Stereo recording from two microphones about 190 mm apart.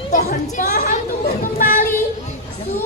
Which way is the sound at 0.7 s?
50° left (ahead or behind).